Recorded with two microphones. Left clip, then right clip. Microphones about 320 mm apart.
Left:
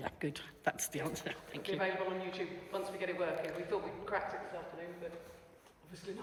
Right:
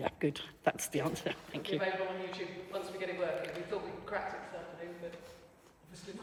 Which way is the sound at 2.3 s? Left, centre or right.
Centre.